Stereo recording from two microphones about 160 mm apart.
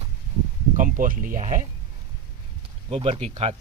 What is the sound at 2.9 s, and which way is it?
Speech, 35° right (ahead or behind).